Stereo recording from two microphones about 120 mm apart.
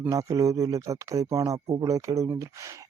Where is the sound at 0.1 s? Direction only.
30° right (ahead or behind).